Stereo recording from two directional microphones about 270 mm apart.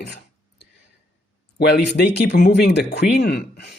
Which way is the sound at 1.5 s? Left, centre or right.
Left.